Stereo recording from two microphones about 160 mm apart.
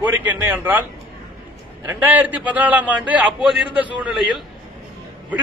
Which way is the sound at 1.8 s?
10° right (ahead or behind).